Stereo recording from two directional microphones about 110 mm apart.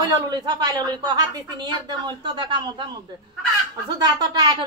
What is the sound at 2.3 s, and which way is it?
Speech, 45° right (ahead or behind).